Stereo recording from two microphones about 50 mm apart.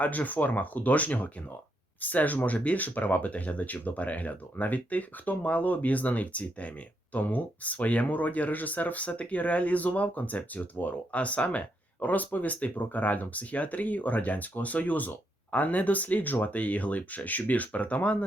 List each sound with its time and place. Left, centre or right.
0.0 s speech: left